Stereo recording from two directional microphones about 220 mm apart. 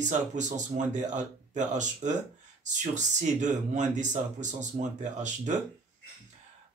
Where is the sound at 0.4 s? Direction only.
35° right (ahead or behind).